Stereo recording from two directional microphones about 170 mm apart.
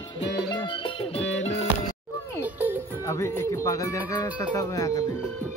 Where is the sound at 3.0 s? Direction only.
15° left (ahead or behind).